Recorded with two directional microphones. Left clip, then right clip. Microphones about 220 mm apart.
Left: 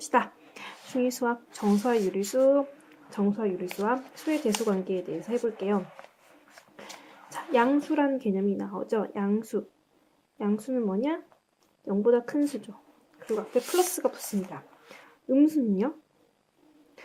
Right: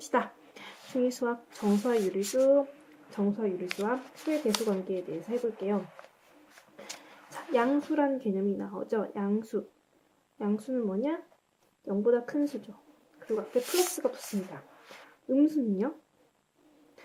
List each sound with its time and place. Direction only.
0.0 s a sound: 25° left (ahead or behind)
1.8 s speech: 25° left (ahead or behind)
7.3 s speech: 25° left (ahead or behind)